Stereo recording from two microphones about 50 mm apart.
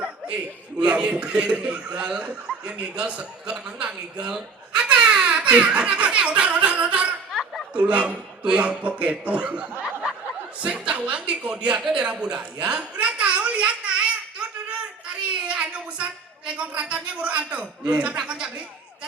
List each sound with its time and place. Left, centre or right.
0.0 s a man's voice: right
4.8 s giggle: right
7.7 s a man's voice: right
10.8 s a sound: right
16.6 s a man's voice: right